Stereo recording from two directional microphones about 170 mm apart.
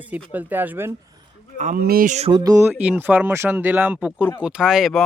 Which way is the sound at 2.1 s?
40° right (ahead or behind).